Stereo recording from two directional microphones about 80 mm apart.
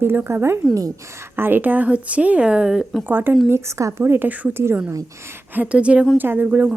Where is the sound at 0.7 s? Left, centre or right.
Right.